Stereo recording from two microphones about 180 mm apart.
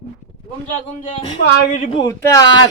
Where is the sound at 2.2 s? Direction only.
20° left (ahead or behind).